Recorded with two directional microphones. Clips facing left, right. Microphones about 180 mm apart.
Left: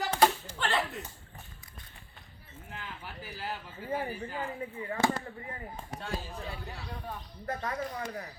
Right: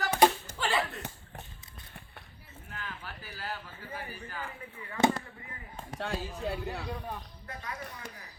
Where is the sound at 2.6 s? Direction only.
20° left (ahead or behind).